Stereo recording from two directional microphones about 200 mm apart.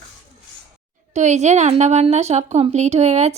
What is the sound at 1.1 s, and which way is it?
Speech, 35° right (ahead or behind).